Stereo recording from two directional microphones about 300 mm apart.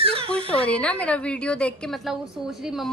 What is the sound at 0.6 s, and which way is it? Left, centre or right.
A woman's voice, centre.